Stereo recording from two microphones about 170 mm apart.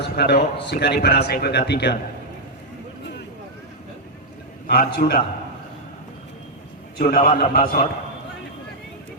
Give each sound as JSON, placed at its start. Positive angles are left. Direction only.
{"t": 0.0, "sound": "speech", "side_deg": 75}
{"t": 4.6, "sound": "speech", "side_deg": 65}
{"t": 7.2, "sound": "a man's voice", "side_deg": 55}